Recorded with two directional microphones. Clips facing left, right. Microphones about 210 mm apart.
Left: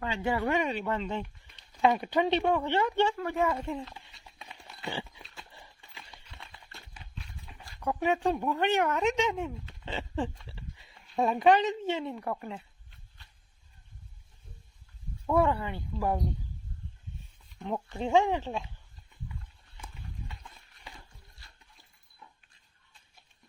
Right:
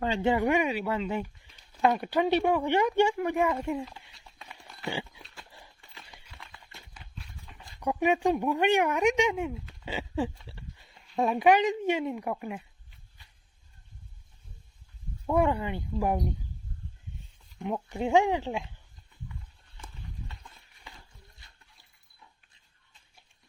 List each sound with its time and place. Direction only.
0.0 s speech: 30° right (ahead or behind); by 4.2 s 10° right (ahead or behind)
7.6 s speech: 15° right (ahead or behind)
15.3 s speech: 15° right (ahead or behind)
17.8 s speech: 15° right (ahead or behind)